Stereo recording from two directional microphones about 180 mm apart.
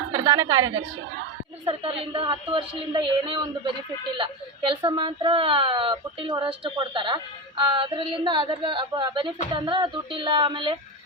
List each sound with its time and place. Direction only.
0.1 s a woman's voice: 20° right (ahead or behind)